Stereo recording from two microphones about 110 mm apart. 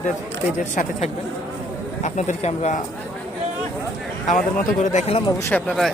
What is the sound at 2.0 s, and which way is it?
Speech, 90° left.